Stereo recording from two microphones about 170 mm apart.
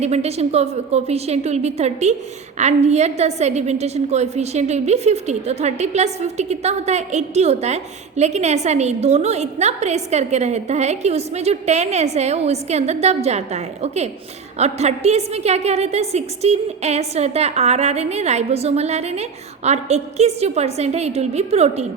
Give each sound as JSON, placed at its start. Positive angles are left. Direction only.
{"t": 0.0, "sound": "a woman's voice", "side_deg": -40}